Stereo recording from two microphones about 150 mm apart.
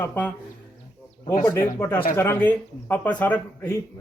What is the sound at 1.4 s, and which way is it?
A man's voice, 15° left (ahead or behind).